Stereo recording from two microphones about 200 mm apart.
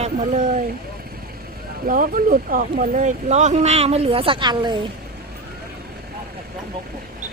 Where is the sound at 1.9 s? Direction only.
40° right (ahead or behind); by 4.8 s 20° right (ahead or behind).